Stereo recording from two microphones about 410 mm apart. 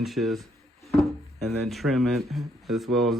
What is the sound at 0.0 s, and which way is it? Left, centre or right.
Speech, centre.